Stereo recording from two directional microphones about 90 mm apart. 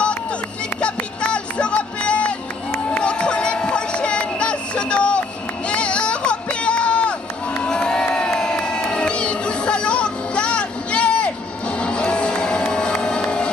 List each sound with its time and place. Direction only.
0.7 s music: 10° left (ahead or behind)
2.9 s a sound: 10° left (ahead or behind)
7.6 s crowd: 10° left (ahead or behind)
8.4 s music: 10° left (ahead or behind)